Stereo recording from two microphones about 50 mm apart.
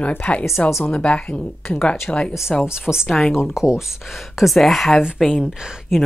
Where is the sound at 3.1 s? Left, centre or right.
Centre.